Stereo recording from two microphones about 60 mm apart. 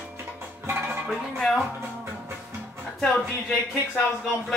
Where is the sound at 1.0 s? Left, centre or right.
Centre.